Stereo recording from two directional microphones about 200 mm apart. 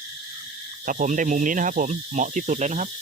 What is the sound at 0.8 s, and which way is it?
Speech, 40° right (ahead or behind).